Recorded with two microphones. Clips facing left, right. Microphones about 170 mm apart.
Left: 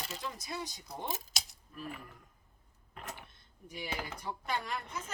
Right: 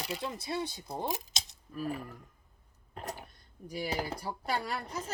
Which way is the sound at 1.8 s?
35° right (ahead or behind).